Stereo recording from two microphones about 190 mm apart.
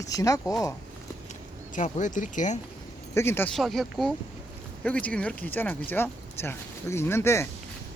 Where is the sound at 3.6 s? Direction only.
Centre (ahead or behind).